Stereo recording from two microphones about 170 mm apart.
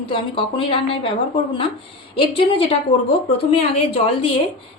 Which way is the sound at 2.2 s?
30° left (ahead or behind).